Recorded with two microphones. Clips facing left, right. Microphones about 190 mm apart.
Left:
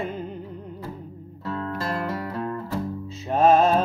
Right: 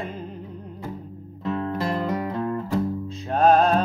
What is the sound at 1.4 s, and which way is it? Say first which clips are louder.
Music: right 3 dB; 20° right (ahead or behind).